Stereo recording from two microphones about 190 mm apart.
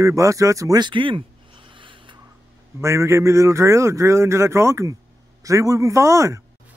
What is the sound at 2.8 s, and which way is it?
A man's voice, 15° right (ahead or behind).